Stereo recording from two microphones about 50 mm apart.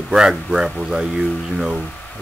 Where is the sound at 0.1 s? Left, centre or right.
Centre.